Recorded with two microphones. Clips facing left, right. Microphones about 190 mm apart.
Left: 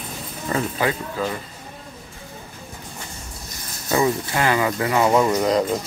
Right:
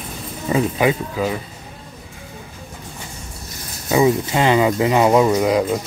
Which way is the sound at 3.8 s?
15° right (ahead or behind).